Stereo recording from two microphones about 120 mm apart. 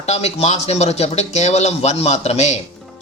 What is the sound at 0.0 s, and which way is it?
A man's voice, 65° left (ahead or behind).